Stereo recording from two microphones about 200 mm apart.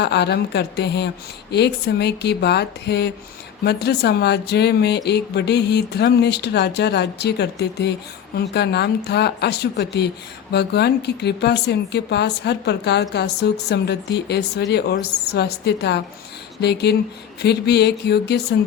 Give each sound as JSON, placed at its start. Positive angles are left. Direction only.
{"t": 0.0, "sound": "speech", "side_deg": 55}